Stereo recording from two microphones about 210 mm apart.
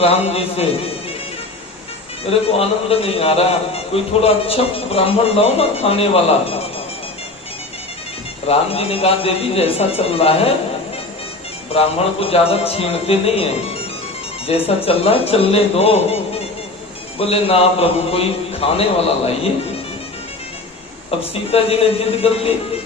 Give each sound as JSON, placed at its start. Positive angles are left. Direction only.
{"t": 0.0, "sound": "a man's voice", "side_deg": 30}
{"t": 2.5, "sound": "a man's voice", "side_deg": 30}
{"t": 8.4, "sound": "a man's voice", "side_deg": 30}
{"t": 11.7, "sound": "a man's voice", "side_deg": 30}
{"t": 14.5, "sound": "a man's voice", "side_deg": 30}
{"t": 17.2, "sound": "a man's voice", "side_deg": 25}
{"t": 21.2, "sound": "a man's voice", "side_deg": 30}